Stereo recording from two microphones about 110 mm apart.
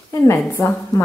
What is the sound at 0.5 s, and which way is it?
Speech, 30° left (ahead or behind).